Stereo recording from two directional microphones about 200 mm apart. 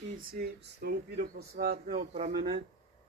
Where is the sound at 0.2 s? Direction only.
50° right (ahead or behind).